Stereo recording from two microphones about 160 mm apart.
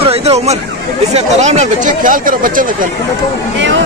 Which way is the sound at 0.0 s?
40° right (ahead or behind).